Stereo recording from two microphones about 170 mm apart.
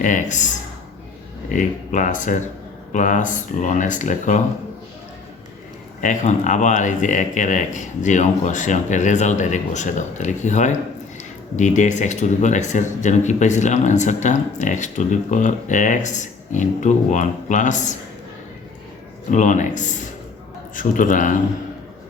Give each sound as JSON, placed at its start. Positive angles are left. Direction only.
{"t": 0.0, "sound": "speech", "side_deg": 50}
{"t": 1.5, "sound": "speech", "side_deg": 50}
{"t": 6.0, "sound": "speech", "side_deg": 45}
{"t": 19.3, "sound": "speech", "side_deg": 45}